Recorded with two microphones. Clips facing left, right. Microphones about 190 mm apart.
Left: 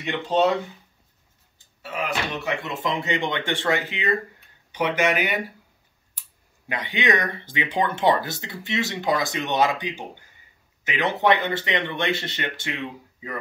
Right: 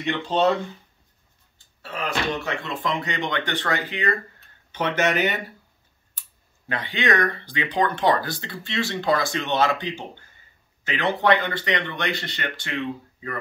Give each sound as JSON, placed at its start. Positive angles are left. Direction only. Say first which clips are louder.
{"t": 0.0, "sound": "speech", "louder": "left 1 dB", "side_deg": 15}
{"t": 1.8, "sound": "speech", "louder": "even", "side_deg": 15}
{"t": 6.7, "sound": "speech", "louder": "even", "side_deg": 20}